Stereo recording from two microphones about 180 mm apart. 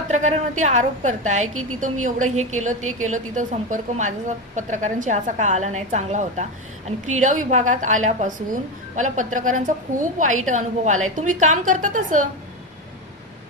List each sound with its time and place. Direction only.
0.1 s a woman's voice: 40° right (ahead or behind)